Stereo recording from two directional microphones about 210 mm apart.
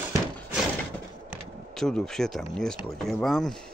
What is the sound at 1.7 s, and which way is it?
Speech, centre (ahead or behind).